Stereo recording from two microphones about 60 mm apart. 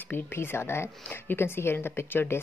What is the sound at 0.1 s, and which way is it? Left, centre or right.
Speech, left.